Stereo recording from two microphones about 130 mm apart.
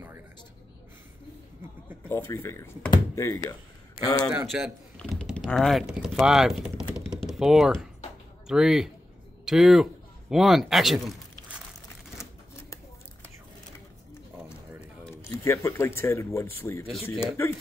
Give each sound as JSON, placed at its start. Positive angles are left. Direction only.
{"t": 2.0, "sound": "speech", "side_deg": 20}
{"t": 4.5, "sound": "speech", "side_deg": -5}
{"t": 7.2, "sound": "typing", "side_deg": -5}
{"t": 8.5, "sound": "speech", "side_deg": -5}
{"t": 15.2, "sound": "speech", "side_deg": 20}